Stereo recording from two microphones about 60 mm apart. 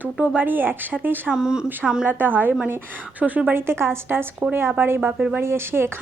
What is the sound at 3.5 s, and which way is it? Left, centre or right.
A woman's voice, right.